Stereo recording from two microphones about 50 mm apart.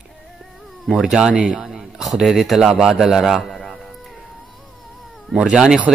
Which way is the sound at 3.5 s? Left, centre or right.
Centre.